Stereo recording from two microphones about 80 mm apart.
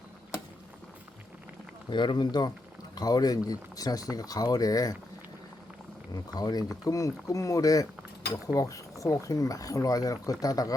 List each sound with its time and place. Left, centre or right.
1.9 s speech: left
2.9 s speech: left
6.1 s speech: left